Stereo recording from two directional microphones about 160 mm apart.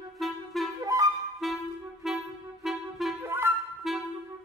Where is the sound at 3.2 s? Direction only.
15° right (ahead or behind).